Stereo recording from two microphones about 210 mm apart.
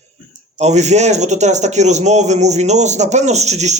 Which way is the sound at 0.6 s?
35° right (ahead or behind).